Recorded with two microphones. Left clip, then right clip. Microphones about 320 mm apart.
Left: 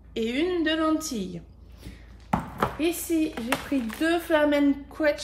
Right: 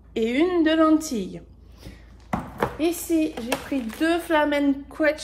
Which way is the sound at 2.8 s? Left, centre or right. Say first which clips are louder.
Right 4 dB; centre.